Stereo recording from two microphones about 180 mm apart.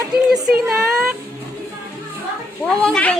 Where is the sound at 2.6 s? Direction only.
5° left (ahead or behind).